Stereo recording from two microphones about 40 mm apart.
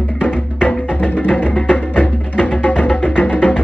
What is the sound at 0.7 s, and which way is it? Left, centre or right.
Music, left.